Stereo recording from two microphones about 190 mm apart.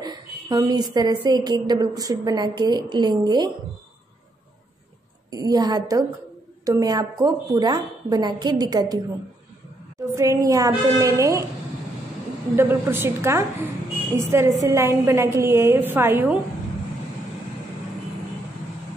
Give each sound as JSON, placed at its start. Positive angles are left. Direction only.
{"t": 0.0, "sound": "a woman's voice", "side_deg": -20}
{"t": 5.3, "sound": "a woman's voice", "side_deg": -20}
{"t": 12.5, "sound": "a woman's voice", "side_deg": -10}